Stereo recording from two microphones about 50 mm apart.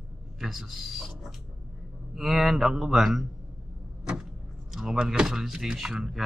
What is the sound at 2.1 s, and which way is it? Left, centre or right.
Speech, centre.